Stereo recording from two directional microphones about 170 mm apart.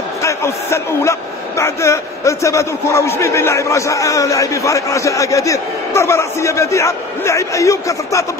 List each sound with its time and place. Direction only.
0.2 s a man's voice: 15° left (ahead or behind)